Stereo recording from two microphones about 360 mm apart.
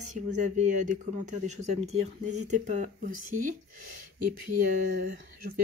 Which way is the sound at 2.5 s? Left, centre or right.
Centre.